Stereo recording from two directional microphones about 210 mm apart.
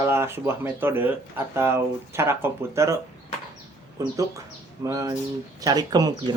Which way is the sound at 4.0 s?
15° right (ahead or behind).